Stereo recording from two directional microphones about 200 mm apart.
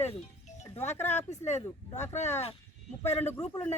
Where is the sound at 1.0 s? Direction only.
35° left (ahead or behind).